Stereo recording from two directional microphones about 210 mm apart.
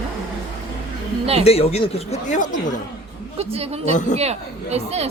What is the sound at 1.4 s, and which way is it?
Speech, 30° left (ahead or behind).